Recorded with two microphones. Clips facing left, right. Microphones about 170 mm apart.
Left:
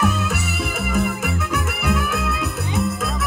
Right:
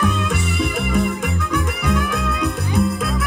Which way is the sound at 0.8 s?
5° left (ahead or behind).